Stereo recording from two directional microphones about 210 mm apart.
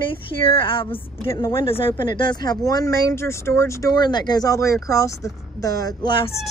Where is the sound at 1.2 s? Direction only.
15° left (ahead or behind).